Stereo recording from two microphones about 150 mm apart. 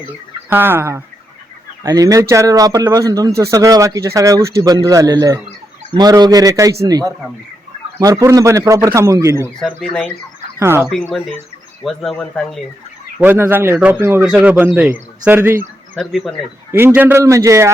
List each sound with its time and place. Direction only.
0.5 s speech: 15° right (ahead or behind)
9.6 s speech: 5° left (ahead or behind)
10.6 s speech: 15° right (ahead or behind)
10.8 s speech: centre (ahead or behind)
13.1 s speech: 10° right (ahead or behind)
16.0 s speech: centre (ahead or behind)
16.7 s speech: 15° right (ahead or behind)